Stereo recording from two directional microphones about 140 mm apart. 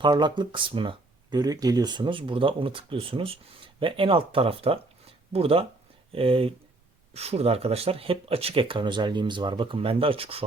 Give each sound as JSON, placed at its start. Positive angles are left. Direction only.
{"t": 0.0, "sound": "speech", "side_deg": -35}